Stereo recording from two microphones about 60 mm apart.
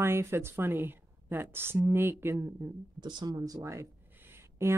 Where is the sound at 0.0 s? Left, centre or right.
Right.